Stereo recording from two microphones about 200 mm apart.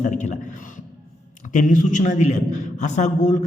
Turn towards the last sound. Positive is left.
turn(degrees=35)  # may be behind; listen again after turning